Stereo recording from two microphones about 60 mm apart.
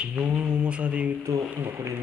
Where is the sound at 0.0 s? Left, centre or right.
Centre.